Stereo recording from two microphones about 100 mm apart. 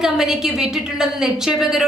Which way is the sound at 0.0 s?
5° right (ahead or behind).